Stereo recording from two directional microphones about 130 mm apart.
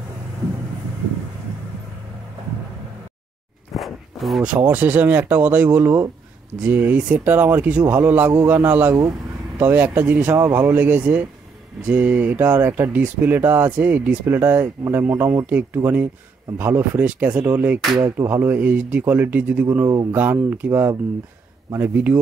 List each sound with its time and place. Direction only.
3.7 s walk: centre (ahead or behind)
4.6 s speech: 15° right (ahead or behind)
17.7 s music: 35° right (ahead or behind)
18.1 s speech: 20° right (ahead or behind)
19.9 s speech: 25° right (ahead or behind)
20.2 s speech: 15° right (ahead or behind)